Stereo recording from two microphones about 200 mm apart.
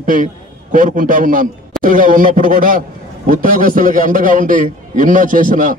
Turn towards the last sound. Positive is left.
turn(degrees=-40)  # may be behind; listen again after turning